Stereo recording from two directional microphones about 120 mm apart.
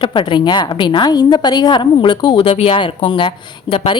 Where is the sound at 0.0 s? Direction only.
45° left (ahead or behind).